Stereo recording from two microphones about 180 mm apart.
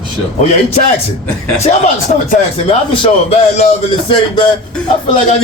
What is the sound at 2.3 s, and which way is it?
Speech, 30° left (ahead or behind).